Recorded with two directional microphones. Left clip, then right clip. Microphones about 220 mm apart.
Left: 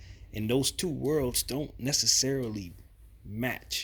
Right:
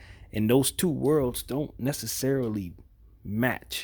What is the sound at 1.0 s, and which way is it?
Speech, 20° right (ahead or behind).